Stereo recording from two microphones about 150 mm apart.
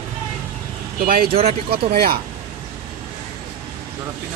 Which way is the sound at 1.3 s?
40° right (ahead or behind).